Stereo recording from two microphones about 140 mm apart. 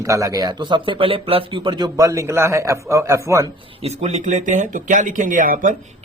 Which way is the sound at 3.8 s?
50° right (ahead or behind).